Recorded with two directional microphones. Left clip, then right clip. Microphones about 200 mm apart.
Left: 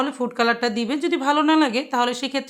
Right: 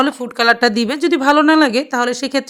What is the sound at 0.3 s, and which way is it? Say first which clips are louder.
A woman's voice: right 8 dB; 35° right (ahead or behind).